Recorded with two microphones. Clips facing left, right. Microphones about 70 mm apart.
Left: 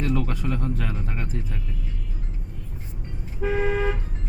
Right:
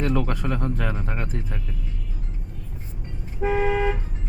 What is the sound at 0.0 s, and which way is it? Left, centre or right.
Speech, right.